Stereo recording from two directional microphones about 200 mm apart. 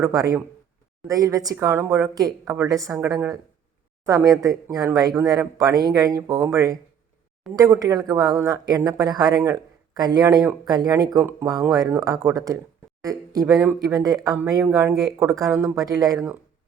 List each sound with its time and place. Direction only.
0.0 s a woman's voice: 15° right (ahead or behind)